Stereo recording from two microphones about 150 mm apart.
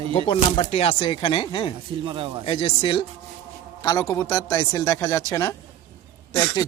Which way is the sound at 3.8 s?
25° left (ahead or behind).